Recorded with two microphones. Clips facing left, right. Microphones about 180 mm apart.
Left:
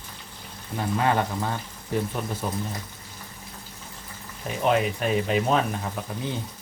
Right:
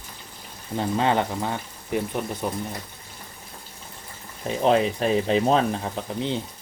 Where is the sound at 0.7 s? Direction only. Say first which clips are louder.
Right 2 dB; 25° right (ahead or behind).